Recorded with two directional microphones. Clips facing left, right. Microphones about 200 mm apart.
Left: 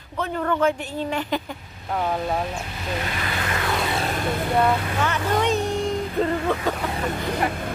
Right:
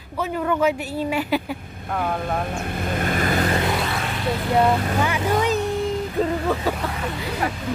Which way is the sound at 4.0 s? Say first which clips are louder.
Left 2 dB; 40° left (ahead or behind).